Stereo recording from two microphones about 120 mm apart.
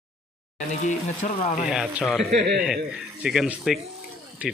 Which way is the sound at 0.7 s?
85° left.